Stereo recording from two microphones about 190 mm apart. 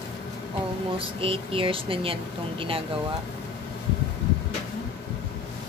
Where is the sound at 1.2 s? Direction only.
30° right (ahead or behind).